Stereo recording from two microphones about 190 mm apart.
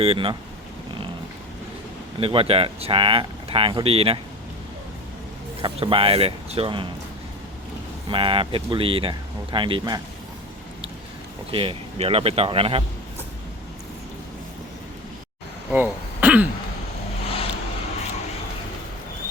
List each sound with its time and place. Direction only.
0.0 s speech: 30° right (ahead or behind)
2.2 s speech: 30° right (ahead or behind)
5.6 s speech: 25° right (ahead or behind)
8.1 s speech: 25° right (ahead or behind)
11.5 s speech: 30° right (ahead or behind)
15.7 s throat clearing: 10° right (ahead or behind)
17.2 s vehicle: 30° left (ahead or behind)